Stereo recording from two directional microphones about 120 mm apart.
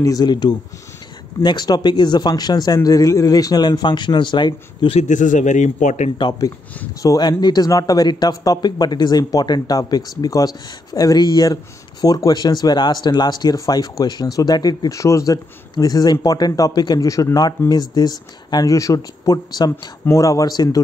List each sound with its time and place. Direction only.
0.0 s speech: 35° left (ahead or behind)
4.9 s a man's voice: 90° left
6.1 s speech: 40° left (ahead or behind)